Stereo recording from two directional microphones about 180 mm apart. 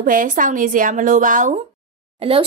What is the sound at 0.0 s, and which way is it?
A woman's voice, 50° right (ahead or behind).